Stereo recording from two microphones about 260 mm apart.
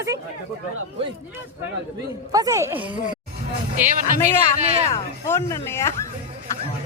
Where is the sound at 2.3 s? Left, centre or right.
Centre.